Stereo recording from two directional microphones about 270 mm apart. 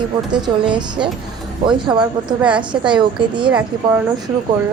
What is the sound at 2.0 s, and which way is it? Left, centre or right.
Speech, centre.